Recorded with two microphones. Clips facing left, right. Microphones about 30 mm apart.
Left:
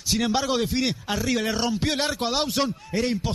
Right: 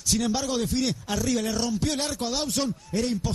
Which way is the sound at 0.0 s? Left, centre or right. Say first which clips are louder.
Left 2 dB; left.